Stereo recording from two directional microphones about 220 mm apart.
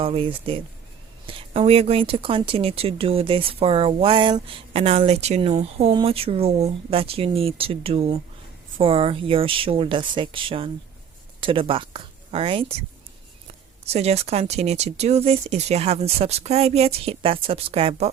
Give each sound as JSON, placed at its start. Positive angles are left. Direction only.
{"t": 0.0, "sound": "speech", "side_deg": -25}
{"t": 13.8, "sound": "speech", "side_deg": -30}